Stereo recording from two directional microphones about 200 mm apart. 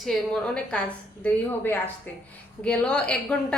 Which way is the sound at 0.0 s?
Centre (ahead or behind).